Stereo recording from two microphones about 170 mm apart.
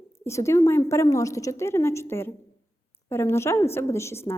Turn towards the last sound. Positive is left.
turn(degrees=15)  # may be behind; listen again after turning